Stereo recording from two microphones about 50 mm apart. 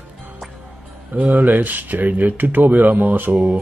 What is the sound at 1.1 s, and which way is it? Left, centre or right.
Speech, right.